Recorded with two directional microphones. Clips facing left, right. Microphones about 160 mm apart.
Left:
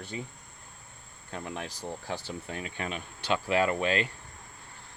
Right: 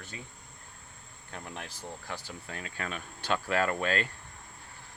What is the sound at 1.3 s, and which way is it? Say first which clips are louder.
Speech: left 5 dB; 15° left (ahead or behind).